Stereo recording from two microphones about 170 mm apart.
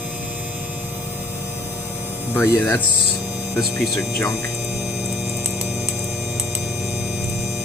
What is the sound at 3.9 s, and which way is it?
Speech, 20° left (ahead or behind).